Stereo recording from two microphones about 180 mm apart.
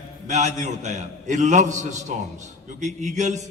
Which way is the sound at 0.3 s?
40° right (ahead or behind).